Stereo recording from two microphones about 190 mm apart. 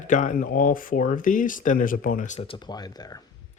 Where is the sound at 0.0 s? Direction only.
40° left (ahead or behind); by 3.2 s 20° left (ahead or behind).